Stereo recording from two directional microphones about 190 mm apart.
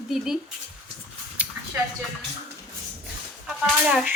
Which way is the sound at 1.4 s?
10° right (ahead or behind).